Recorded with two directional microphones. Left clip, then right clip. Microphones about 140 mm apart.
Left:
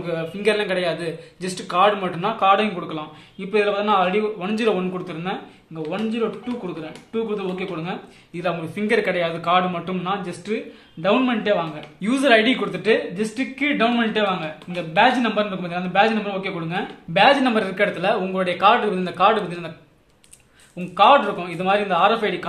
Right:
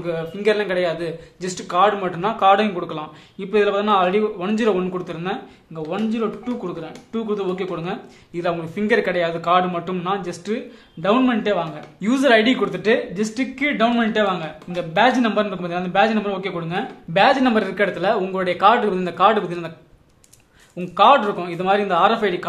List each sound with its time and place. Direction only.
0.0 s a man's voice: 20° right (ahead or behind); by 5.9 s 50° right (ahead or behind)
7.2 s speech: 45° right (ahead or behind)
8.4 s a man's voice: 30° right (ahead or behind)
20.9 s a man's voice: 40° right (ahead or behind)